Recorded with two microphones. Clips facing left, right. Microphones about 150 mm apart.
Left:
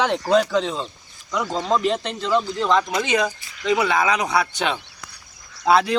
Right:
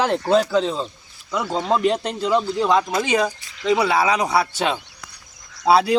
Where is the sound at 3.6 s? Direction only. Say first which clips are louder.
Right 2 dB; 30° right (ahead or behind).